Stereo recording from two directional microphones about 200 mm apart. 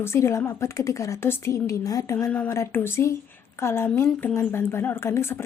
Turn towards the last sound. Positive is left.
turn(degrees=15)  # may be behind; listen again after turning